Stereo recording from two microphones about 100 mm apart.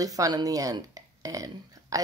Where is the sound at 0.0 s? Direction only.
35° right (ahead or behind).